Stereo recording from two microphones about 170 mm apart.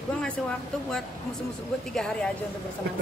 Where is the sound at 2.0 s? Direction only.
5° left (ahead or behind).